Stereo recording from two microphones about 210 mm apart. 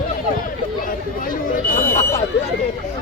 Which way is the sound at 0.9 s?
40° left (ahead or behind).